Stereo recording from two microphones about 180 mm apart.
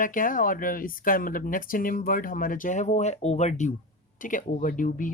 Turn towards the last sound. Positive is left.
turn(degrees=50)  # may be behind; listen again after turning